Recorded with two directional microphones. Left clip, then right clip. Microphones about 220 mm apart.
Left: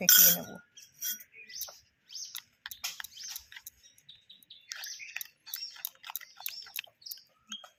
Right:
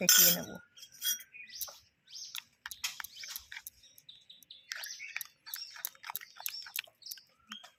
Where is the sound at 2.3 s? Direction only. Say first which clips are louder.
Even; 15° right (ahead or behind).